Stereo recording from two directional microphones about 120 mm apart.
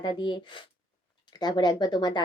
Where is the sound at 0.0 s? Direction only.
40° left (ahead or behind).